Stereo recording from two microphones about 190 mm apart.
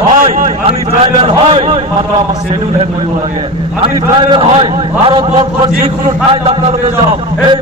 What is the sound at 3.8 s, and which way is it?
A man's voice, 25° right (ahead or behind).